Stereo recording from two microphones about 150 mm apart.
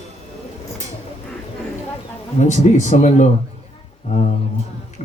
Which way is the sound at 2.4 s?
50° left (ahead or behind).